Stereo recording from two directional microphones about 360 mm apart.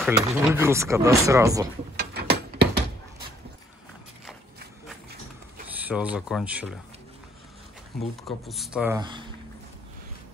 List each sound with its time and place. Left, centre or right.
0.0 s speech: centre
2.0 s a sound: right
5.8 s speech: centre
8.0 s speech: centre